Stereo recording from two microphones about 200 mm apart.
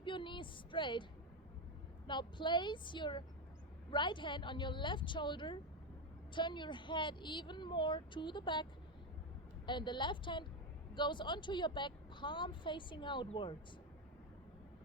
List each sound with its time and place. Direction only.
0.0 s speech: 25° left (ahead or behind)
2.0 s a woman's voice: 25° left (ahead or behind)
9.6 s a woman's voice: 25° left (ahead or behind)